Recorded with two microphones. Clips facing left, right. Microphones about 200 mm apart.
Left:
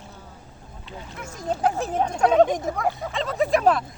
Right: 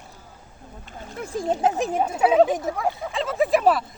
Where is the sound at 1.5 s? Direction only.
20° right (ahead or behind).